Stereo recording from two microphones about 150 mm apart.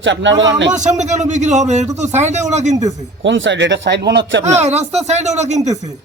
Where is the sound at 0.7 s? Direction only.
55° right (ahead or behind).